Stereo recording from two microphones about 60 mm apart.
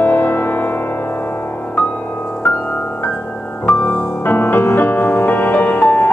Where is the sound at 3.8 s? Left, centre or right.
Left.